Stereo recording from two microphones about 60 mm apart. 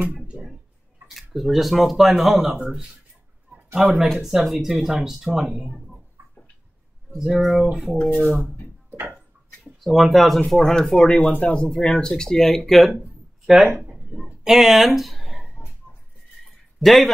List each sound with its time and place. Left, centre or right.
0.3 s a sound: right
1.0 s speech: centre
2.5 s speech: centre
7.2 s speech: centre
8.2 s speech: centre
8.9 s tick-tock: right
9.8 s speech: centre
10.6 s speech: centre
14.1 s a sound: centre
16.8 s speech: centre